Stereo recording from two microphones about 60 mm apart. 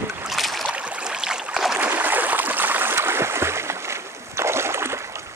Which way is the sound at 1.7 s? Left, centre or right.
Right.